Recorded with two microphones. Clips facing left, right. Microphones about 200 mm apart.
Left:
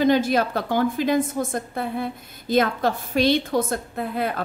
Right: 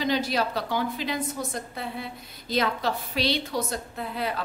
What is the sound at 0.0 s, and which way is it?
A woman's voice, 50° left (ahead or behind).